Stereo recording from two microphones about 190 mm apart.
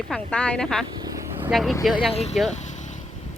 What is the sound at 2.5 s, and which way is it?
Vehicle, 40° left (ahead or behind).